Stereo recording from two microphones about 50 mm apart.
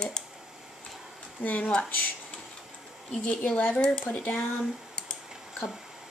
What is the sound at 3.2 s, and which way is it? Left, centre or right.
Speech, left.